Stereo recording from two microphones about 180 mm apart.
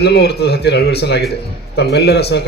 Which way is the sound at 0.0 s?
65° left (ahead or behind).